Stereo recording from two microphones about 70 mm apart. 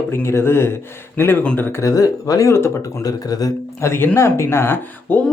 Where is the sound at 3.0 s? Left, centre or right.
Left.